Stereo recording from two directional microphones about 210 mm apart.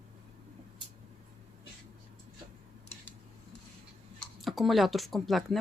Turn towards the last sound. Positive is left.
turn(degrees=0)  # may be behind; listen again after turning